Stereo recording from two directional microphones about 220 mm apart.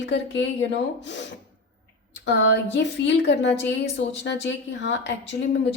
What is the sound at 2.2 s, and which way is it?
A woman's voice, 55° left (ahead or behind).